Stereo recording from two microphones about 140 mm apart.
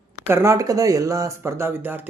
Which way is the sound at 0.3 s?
20° right (ahead or behind).